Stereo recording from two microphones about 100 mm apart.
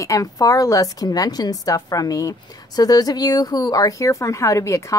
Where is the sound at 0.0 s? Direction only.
35° left (ahead or behind).